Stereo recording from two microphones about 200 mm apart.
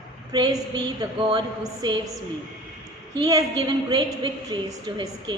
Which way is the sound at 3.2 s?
15° right (ahead or behind).